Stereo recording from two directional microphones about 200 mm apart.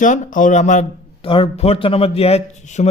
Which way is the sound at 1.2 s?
25° left (ahead or behind).